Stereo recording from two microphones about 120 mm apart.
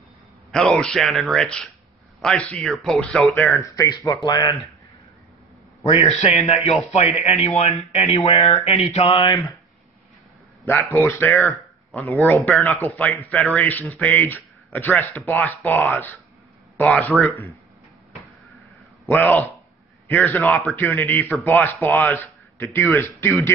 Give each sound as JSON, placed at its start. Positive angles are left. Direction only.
{"t": 0.5, "sound": "speech", "side_deg": 5}
{"t": 3.6, "sound": "speech", "side_deg": 30}
{"t": 5.9, "sound": "a man's voice", "side_deg": 50}
{"t": 10.6, "sound": "a man's voice", "side_deg": 20}
{"t": 19.0, "sound": "a man's voice", "side_deg": 15}